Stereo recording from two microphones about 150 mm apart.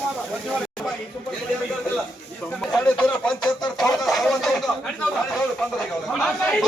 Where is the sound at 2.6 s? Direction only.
5° left (ahead or behind).